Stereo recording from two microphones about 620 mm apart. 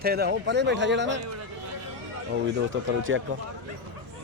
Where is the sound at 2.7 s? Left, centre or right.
Centre.